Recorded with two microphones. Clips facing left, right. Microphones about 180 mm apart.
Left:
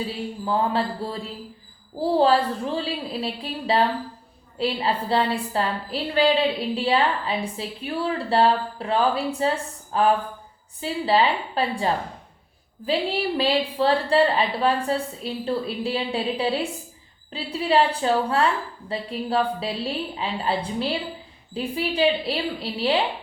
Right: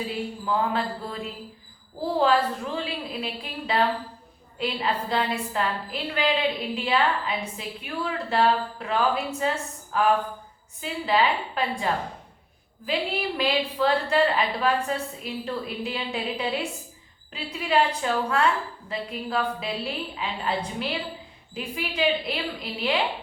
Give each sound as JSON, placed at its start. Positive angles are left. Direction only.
{"t": 0.4, "sound": "a woman's voice", "side_deg": 30}
{"t": 12.8, "sound": "a woman's voice", "side_deg": 30}